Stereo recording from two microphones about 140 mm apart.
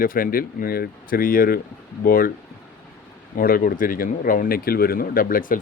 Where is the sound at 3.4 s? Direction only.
90° left.